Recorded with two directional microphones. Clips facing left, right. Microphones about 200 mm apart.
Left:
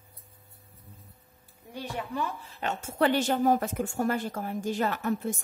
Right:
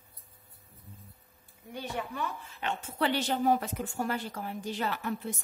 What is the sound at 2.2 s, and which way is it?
A woman's voice, 40° left (ahead or behind).